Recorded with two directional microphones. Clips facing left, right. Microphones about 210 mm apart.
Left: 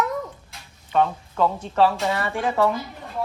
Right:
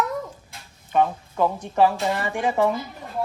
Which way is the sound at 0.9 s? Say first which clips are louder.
Even; 15° right (ahead or behind).